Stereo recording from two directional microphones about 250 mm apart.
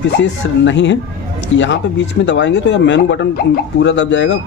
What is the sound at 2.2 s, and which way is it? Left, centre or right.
Speech, left.